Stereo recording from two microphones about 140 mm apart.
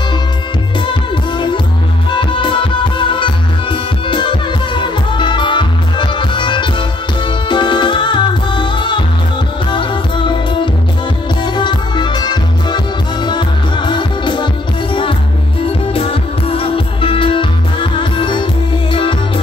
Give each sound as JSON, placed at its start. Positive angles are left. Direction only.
{"t": 2.0, "sound": "music", "side_deg": 35}